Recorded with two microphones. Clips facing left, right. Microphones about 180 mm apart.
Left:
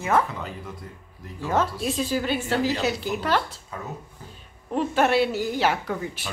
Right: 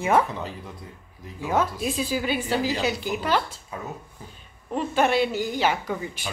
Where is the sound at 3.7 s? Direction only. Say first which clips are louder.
Right 1 dB; 10° right (ahead or behind).